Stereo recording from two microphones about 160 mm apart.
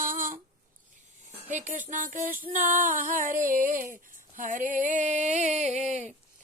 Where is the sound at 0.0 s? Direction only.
60° right (ahead or behind).